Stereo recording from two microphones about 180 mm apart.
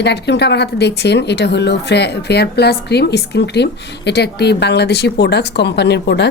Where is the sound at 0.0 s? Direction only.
70° left (ahead or behind).